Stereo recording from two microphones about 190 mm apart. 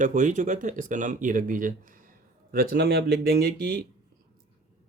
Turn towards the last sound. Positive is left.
turn(degrees=-55)  # may be behind; listen again after turning